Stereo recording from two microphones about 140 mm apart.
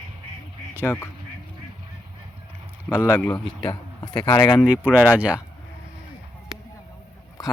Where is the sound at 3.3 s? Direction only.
30° left (ahead or behind).